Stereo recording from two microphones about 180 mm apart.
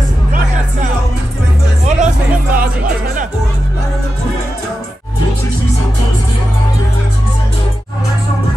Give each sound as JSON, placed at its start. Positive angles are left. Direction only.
{"t": 1.9, "sound": "music", "side_deg": -40}